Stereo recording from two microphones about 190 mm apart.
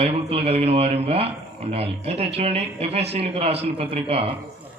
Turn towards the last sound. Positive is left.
turn(degrees=-30)  # may be behind; listen again after turning